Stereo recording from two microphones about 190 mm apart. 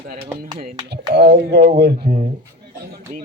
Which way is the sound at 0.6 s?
60° right (ahead or behind).